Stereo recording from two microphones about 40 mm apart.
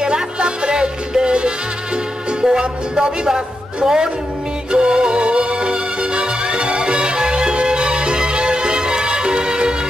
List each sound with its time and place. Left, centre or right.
0.0 s music: right